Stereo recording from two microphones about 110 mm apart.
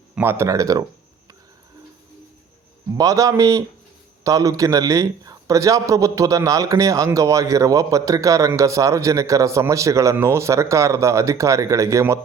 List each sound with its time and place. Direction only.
0.2 s a man's voice: 20° right (ahead or behind)
2.9 s a man's voice: 30° right (ahead or behind)